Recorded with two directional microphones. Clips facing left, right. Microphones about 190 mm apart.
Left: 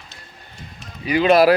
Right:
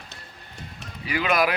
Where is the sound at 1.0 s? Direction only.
25° left (ahead or behind).